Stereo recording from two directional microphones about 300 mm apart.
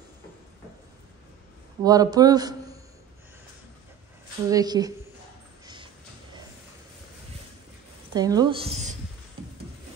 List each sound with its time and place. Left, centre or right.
1.8 s a man's voice: centre
4.5 s a woman's voice: centre
8.1 s a woman's voice: centre